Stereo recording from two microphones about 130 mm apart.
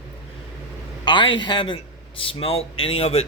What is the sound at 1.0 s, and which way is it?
A man's voice, 35° left (ahead or behind).